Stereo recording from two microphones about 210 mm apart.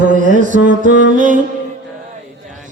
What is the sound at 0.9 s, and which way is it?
Music, 60° left (ahead or behind).